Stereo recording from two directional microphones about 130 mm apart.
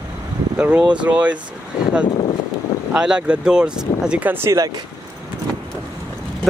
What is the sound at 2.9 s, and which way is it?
Speech, 5° right (ahead or behind).